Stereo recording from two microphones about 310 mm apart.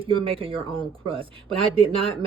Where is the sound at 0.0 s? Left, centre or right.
Centre.